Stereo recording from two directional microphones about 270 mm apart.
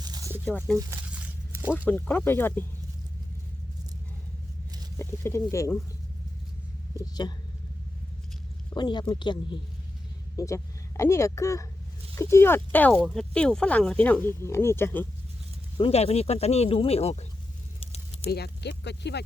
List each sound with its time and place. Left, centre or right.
0.0 s a sound: centre
0.4 s speech: centre
0.8 s a sound: centre
1.9 s speech: centre
4.9 s speech: centre
7.0 s speech: centre
8.7 s speech: centre
15.8 s speech: left
17.7 s a sound: left
18.3 s speech: left